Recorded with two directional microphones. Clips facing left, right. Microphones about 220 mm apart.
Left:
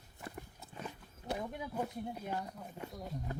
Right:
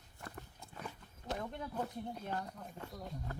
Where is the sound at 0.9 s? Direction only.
10° left (ahead or behind).